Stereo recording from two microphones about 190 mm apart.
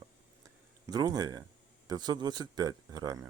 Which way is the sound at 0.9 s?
20° right (ahead or behind).